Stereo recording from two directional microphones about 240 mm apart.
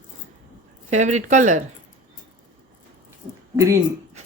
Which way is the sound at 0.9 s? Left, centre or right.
Right.